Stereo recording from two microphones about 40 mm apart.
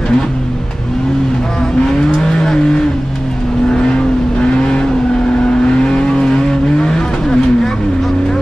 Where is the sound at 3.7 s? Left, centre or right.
Left.